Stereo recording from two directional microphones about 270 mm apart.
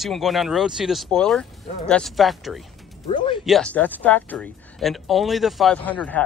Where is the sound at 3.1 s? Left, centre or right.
Centre.